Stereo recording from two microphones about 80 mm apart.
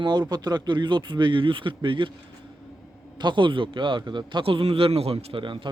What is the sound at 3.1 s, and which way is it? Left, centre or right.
A man's voice, right.